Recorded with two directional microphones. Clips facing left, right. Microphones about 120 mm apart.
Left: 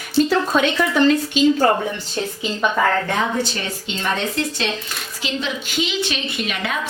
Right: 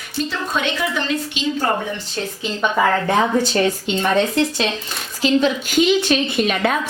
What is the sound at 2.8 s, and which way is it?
Speech, 10° right (ahead or behind).